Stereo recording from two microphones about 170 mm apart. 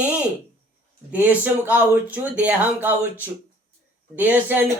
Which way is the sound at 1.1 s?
10° right (ahead or behind).